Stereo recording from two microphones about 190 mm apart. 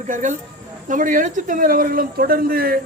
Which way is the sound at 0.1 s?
40° right (ahead or behind).